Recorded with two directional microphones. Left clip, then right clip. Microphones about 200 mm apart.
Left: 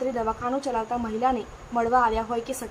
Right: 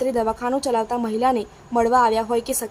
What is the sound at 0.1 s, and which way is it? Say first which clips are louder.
A woman's voice: right 5 dB; 40° right (ahead or behind).